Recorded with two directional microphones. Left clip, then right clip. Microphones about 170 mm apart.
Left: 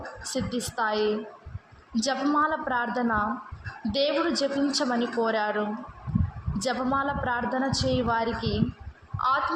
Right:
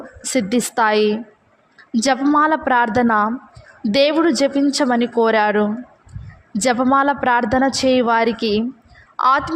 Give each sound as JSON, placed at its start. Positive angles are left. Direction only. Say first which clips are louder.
{"t": 0.2, "sound": "a woman's voice", "louder": "right 13 dB", "side_deg": -65}